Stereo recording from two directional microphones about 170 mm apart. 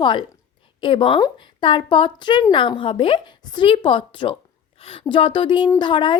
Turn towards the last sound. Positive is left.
turn(degrees=30)  # may be behind; listen again after turning